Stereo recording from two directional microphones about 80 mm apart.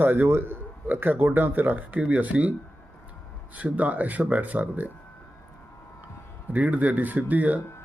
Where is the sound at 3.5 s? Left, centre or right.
Centre.